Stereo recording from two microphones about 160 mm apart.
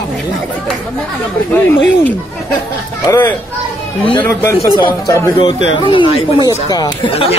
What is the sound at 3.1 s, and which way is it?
Speech, 15° left (ahead or behind).